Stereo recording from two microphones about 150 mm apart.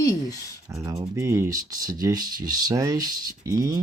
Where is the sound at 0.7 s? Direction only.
25° right (ahead or behind).